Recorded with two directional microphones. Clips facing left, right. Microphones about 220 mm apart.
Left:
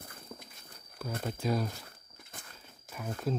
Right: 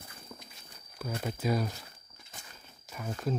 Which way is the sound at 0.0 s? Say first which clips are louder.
Left 1 dB; 55° left (ahead or behind).